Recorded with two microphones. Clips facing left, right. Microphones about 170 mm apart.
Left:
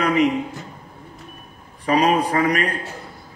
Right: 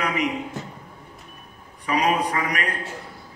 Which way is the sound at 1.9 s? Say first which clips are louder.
Left 4 dB; 35° left (ahead or behind).